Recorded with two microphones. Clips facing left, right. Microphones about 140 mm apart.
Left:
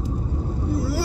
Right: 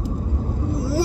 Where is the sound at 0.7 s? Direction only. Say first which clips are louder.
Right 3 dB; 25° right (ahead or behind).